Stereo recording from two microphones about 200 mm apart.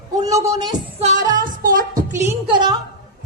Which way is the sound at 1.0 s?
35° right (ahead or behind).